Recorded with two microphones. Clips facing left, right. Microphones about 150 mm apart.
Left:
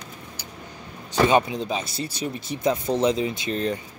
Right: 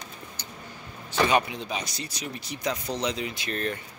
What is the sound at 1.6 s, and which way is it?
Speech, 30° left (ahead or behind).